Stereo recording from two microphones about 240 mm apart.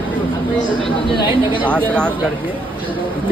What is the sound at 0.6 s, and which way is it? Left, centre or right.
Speech, right.